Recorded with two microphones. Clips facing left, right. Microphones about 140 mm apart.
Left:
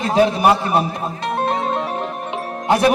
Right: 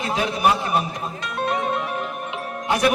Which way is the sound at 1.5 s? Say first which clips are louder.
Right 1 dB; 30° left (ahead or behind).